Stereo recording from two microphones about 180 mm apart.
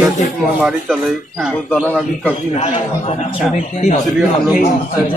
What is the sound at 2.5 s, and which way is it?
Speech, 35° left (ahead or behind).